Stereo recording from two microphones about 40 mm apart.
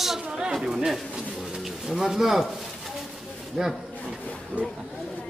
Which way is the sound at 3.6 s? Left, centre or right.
Centre.